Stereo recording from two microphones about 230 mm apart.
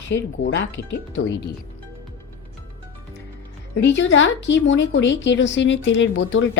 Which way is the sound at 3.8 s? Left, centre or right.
Left.